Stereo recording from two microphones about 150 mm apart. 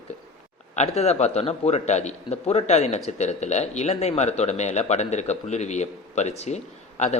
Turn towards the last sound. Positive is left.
turn(degrees=50)  # may be behind; listen again after turning